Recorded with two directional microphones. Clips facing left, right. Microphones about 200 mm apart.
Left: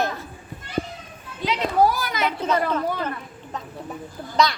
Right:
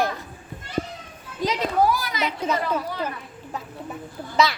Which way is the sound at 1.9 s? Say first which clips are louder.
Right 1 dB; 50° left (ahead or behind).